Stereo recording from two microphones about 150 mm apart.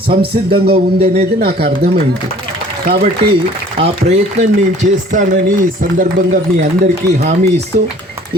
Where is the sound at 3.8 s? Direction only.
45° right (ahead or behind).